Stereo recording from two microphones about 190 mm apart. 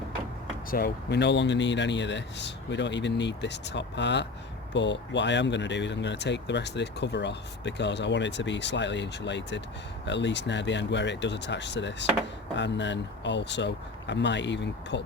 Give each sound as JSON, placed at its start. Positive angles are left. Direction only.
{"t": 0.7, "sound": "speech", "side_deg": 55}